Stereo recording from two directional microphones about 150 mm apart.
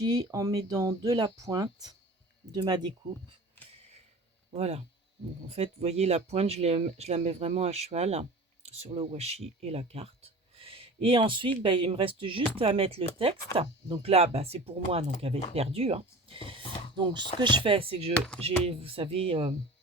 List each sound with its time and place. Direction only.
0.0 s speech: 25° right (ahead or behind)
4.5 s speech: 45° right (ahead or behind)